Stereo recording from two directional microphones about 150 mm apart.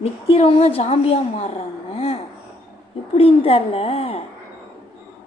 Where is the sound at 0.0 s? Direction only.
40° left (ahead or behind).